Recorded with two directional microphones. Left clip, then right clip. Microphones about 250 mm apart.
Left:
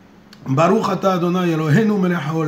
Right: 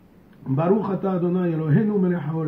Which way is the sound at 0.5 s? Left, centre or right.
Left.